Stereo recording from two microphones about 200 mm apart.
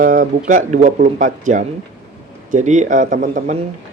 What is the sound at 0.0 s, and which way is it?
Speech, 45° right (ahead or behind).